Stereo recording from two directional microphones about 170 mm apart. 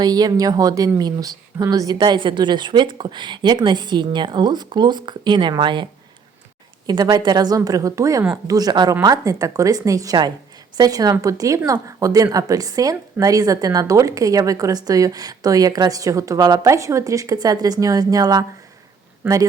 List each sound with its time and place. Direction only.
0.0 s speech: 20° right (ahead or behind)
6.8 s speech: 25° right (ahead or behind)